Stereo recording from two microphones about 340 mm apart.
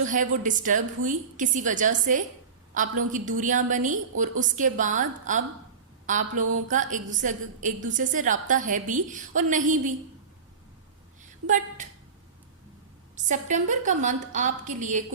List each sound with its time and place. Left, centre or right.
0.1 s a woman's voice: right
11.4 s a woman's voice: right
13.1 s a woman's voice: right